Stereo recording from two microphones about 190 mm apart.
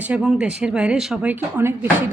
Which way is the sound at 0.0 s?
5° right (ahead or behind).